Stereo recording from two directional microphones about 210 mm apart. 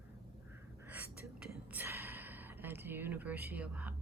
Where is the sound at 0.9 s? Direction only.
10° right (ahead or behind).